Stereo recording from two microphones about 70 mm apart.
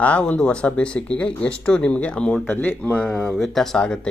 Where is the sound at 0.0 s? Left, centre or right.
Centre.